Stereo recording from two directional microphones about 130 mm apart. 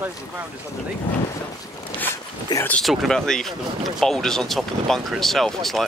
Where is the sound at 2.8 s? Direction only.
Centre (ahead or behind).